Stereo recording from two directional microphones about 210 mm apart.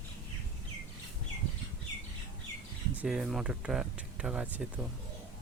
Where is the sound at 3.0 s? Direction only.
Centre (ahead or behind).